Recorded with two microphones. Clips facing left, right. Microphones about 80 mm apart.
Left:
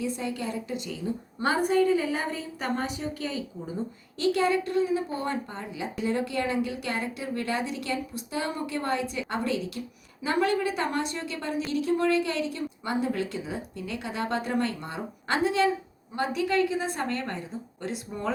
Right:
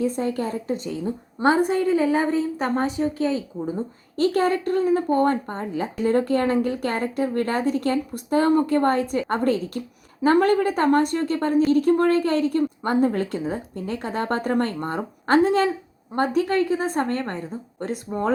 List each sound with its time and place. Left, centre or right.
0.0 s a woman's voice: right